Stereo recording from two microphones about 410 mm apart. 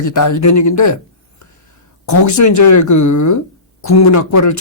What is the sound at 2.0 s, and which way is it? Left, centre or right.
Speech, left.